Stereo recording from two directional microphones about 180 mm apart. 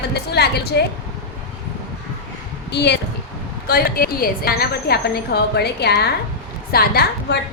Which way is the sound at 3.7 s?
55° left (ahead or behind).